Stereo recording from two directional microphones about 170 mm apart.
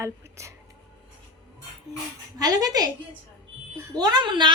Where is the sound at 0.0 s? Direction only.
15° right (ahead or behind).